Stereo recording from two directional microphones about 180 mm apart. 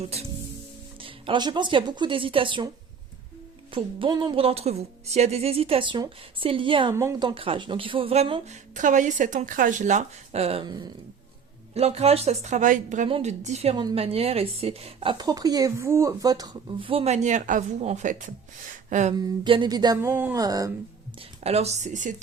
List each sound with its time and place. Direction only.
0.1 s a woman's voice: 35° right (ahead or behind)
3.7 s speech: 30° right (ahead or behind)
6.9 s speech: 15° right (ahead or behind)
11.7 s speech: 35° right (ahead or behind)
13.1 s speech: 35° right (ahead or behind)
18.9 s a sound: 40° right (ahead or behind)
19.1 s a woman's voice: 25° right (ahead or behind)
21.4 s speech: 35° right (ahead or behind)